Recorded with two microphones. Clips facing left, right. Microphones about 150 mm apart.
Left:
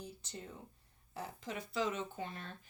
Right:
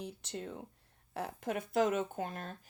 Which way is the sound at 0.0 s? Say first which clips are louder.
Right 6 dB; 70° right (ahead or behind).